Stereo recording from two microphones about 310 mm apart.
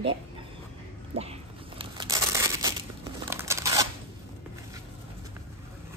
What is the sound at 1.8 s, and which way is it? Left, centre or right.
Crumpling, centre.